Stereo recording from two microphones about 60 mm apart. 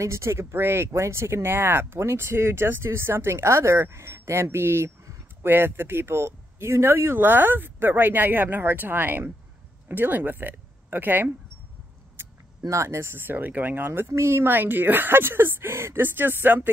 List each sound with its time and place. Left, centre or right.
0.0 s speech: right
12.2 s a sound: right
12.6 s speech: right